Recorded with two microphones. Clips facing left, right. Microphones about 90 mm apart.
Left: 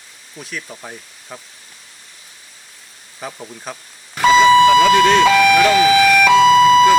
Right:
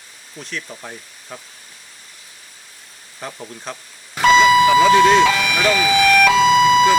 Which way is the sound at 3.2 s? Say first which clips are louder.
Left 1 dB; 5° left (ahead or behind).